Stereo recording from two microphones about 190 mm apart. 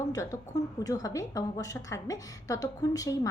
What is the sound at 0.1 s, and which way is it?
A woman's voice, 20° left (ahead or behind).